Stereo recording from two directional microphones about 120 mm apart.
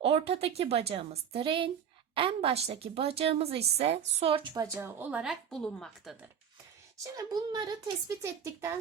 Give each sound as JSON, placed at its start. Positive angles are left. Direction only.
{"t": 0.0, "sound": "a woman's voice", "side_deg": -55}
{"t": 4.5, "sound": "speech", "side_deg": -25}
{"t": 5.2, "sound": "a woman's voice", "side_deg": 0}
{"t": 7.2, "sound": "speech", "side_deg": -30}